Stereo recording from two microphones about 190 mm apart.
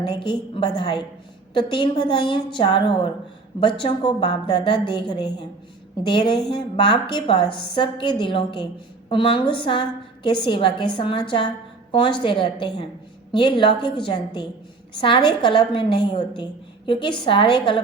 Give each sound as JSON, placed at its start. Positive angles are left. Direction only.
{"t": 0.1, "sound": "a woman's voice", "side_deg": 25}